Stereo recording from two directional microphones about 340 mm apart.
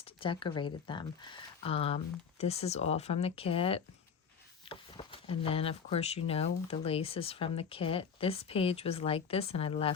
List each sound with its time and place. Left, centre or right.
0.0 s speech: centre